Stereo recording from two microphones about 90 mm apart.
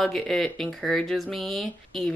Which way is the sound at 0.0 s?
5° left (ahead or behind).